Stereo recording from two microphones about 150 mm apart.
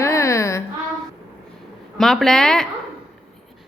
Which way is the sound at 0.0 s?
20° left (ahead or behind).